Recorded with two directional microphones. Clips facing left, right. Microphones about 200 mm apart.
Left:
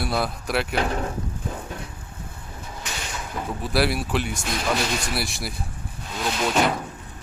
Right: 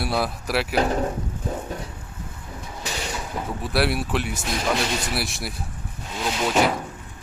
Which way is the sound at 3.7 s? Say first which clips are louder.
Even; centre (ahead or behind).